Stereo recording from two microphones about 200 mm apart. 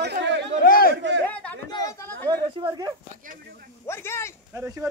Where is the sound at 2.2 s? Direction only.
20° right (ahead or behind).